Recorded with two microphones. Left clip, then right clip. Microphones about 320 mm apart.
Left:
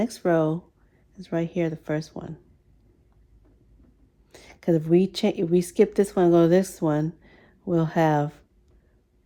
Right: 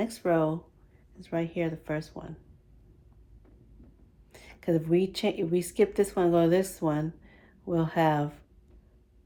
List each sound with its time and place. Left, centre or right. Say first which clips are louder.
0.0 s speech: left 4 dB; left
4.3 s a woman's voice: left 5 dB; left